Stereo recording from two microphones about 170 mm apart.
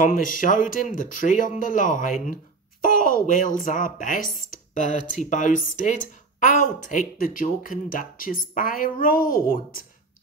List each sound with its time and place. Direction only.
0.0 s speech: 50° left (ahead or behind)